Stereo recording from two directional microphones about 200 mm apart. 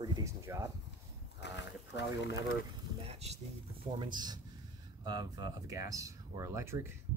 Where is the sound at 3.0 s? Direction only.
30° right (ahead or behind).